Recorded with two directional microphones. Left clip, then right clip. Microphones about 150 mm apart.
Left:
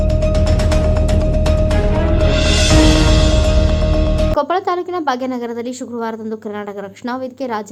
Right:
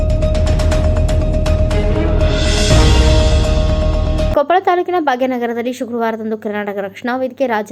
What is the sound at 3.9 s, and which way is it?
Music, centre (ahead or behind).